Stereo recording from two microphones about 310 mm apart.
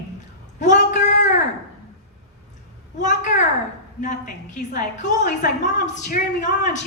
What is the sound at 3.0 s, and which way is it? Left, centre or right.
Speech, left.